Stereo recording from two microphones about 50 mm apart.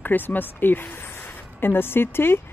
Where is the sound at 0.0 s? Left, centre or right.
Left.